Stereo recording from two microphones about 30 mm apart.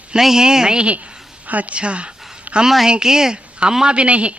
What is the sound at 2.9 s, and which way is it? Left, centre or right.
Speech, right.